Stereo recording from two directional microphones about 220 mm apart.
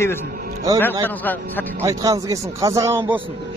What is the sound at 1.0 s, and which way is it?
Speech, 10° left (ahead or behind).